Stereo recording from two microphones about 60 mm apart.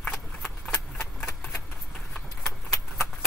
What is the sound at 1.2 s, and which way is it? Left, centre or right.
Typewriter, left.